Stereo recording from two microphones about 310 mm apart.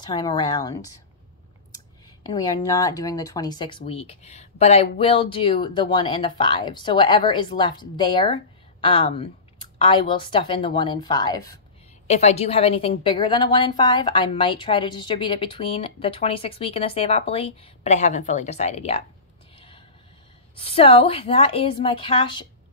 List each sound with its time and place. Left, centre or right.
0.0 s a woman's voice: centre
2.2 s a woman's voice: centre
20.5 s a woman's voice: centre